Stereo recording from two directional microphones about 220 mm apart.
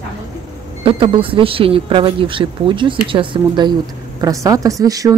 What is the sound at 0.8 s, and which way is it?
A woman's voice, 25° right (ahead or behind).